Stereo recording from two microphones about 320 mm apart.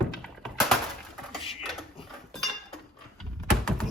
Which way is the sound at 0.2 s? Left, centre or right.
Centre.